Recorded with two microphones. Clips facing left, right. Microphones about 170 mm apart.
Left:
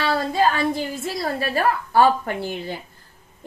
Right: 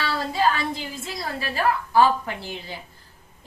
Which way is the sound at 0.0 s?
50° left (ahead or behind).